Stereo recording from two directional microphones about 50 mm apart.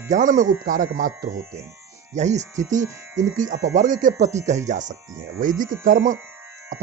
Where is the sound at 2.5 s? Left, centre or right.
Right.